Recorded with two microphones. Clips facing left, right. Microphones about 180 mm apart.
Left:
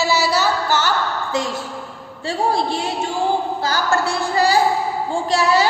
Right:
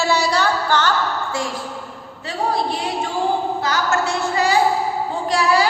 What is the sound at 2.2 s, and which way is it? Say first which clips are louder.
A woman's voice: left 2 dB; 25° left (ahead or behind).